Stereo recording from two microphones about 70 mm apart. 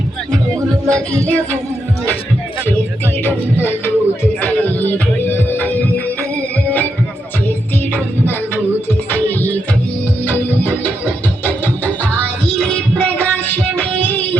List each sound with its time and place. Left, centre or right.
0.9 s music: centre
3.2 s music: left
7.9 s music: left
10.2 s music: left
12.5 s music: centre